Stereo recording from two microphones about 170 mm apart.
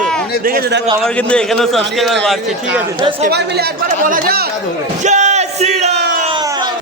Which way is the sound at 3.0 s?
30° right (ahead or behind).